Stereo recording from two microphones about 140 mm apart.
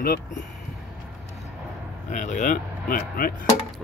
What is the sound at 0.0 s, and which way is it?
Speech, 90° left.